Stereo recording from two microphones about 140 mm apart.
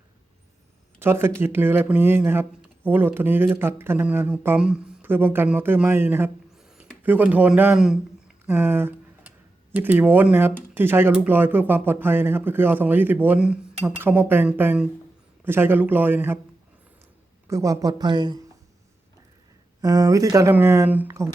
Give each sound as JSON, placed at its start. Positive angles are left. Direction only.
{"t": 0.9, "sound": "speech", "side_deg": -15}
{"t": 8.4, "sound": "a sound", "side_deg": -15}
{"t": 9.7, "sound": "speech", "side_deg": -15}
{"t": 17.5, "sound": "speech", "side_deg": -25}
{"t": 19.8, "sound": "speech", "side_deg": -25}